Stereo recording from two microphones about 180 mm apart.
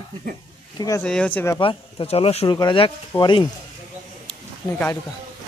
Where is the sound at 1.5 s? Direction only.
30° left (ahead or behind).